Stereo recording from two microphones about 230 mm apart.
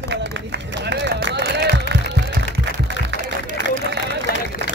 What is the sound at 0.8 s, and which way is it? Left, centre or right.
Run, right.